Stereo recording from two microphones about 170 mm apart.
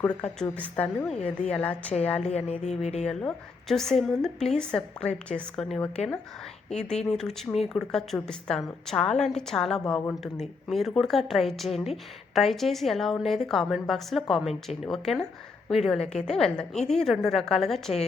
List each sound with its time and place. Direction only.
0.0 s a woman's voice: 10° left (ahead or behind)
2.2 s music: 40° left (ahead or behind)
3.1 s a woman's voice: 5° left (ahead or behind)
7.0 s a woman's voice: 5° left (ahead or behind)